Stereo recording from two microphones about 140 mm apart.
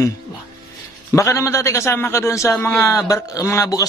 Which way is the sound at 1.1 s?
20° left (ahead or behind).